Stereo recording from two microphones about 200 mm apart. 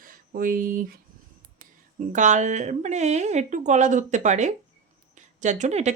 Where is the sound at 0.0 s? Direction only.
45° right (ahead or behind).